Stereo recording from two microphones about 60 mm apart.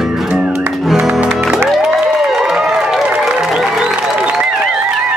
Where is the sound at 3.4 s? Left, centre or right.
Centre.